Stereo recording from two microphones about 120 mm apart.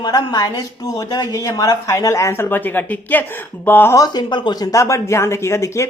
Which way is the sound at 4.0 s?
40° left (ahead or behind).